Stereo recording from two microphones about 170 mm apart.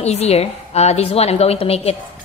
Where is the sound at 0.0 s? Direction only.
40° left (ahead or behind).